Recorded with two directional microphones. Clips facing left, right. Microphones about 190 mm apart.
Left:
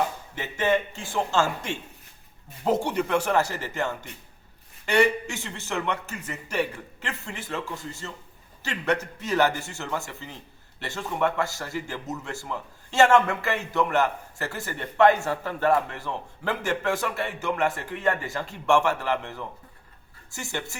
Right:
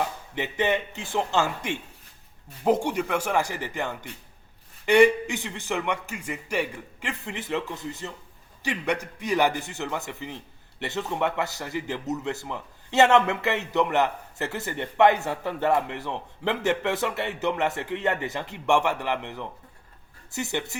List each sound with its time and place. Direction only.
0.3 s a man's voice: 20° right (ahead or behind)